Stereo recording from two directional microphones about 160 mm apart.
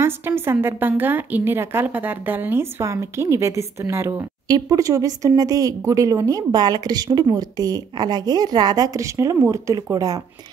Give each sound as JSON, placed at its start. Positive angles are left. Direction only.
{"t": 0.0, "sound": "a woman's voice", "side_deg": -15}